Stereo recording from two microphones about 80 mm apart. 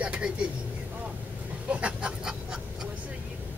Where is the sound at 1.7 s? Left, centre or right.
Centre.